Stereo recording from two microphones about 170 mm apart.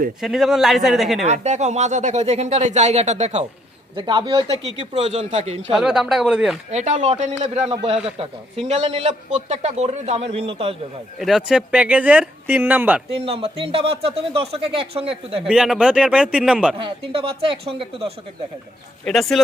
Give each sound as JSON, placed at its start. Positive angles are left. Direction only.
{"t": 0.2, "sound": "a man's voice", "side_deg": 0}
{"t": 1.2, "sound": "speech", "side_deg": -40}
{"t": 3.9, "sound": "speech", "side_deg": -25}
{"t": 5.7, "sound": "a man's voice", "side_deg": 0}
{"t": 6.7, "sound": "speech", "side_deg": -40}
{"t": 11.2, "sound": "speech", "side_deg": 0}
{"t": 13.1, "sound": "speech", "side_deg": -35}
{"t": 15.4, "sound": "a man's voice", "side_deg": -5}
{"t": 16.7, "sound": "speech", "side_deg": -30}
{"t": 19.0, "sound": "a man's voice", "side_deg": 0}